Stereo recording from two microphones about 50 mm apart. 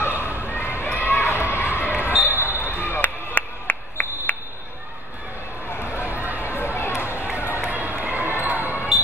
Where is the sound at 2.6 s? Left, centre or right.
Left.